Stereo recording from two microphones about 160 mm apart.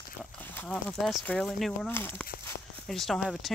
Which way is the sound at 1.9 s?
15° left (ahead or behind).